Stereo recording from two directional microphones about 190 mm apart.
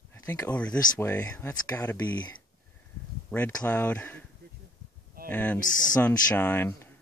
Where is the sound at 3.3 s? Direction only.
10° left (ahead or behind).